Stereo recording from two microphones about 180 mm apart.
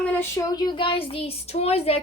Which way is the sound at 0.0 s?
10° left (ahead or behind).